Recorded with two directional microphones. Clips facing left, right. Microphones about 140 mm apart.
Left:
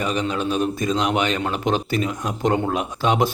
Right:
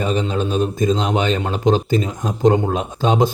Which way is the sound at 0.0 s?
25° right (ahead or behind).